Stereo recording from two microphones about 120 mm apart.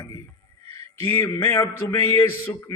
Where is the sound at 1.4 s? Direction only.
25° left (ahead or behind).